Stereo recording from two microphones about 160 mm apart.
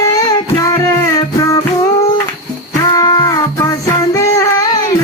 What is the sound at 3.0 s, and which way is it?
Child singing, 25° left (ahead or behind).